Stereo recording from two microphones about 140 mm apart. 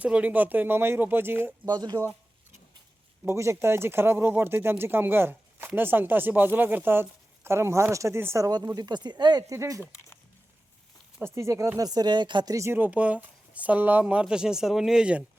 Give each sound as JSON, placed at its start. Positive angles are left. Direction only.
{"t": 0.0, "sound": "speech", "side_deg": -10}
{"t": 1.6, "sound": "speech", "side_deg": -30}
{"t": 3.2, "sound": "speech", "side_deg": -20}
{"t": 11.3, "sound": "speech", "side_deg": -20}